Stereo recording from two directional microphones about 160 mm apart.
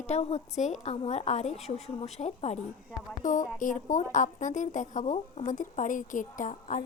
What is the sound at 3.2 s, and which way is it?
A woman's voice, 50° left (ahead or behind).